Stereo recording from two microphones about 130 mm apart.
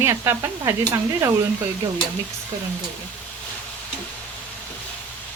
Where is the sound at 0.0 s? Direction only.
20° right (ahead or behind).